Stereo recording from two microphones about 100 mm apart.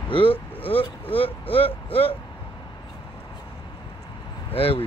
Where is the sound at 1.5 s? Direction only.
70° left (ahead or behind).